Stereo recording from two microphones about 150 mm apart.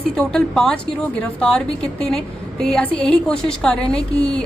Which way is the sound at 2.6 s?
5° left (ahead or behind).